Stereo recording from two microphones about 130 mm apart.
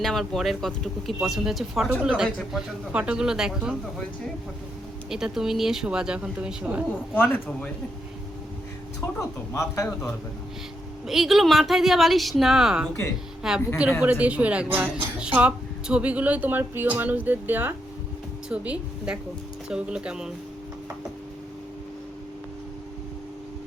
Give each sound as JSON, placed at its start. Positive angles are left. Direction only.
{"t": 0.0, "sound": "speech", "side_deg": 0}
{"t": 5.0, "sound": "speech", "side_deg": -5}
{"t": 7.1, "sound": "speech", "side_deg": 15}
{"t": 9.5, "sound": "speech", "side_deg": 20}
{"t": 11.0, "sound": "speech", "side_deg": -5}